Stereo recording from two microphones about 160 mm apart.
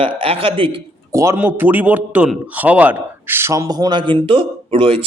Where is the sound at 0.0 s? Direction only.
35° right (ahead or behind).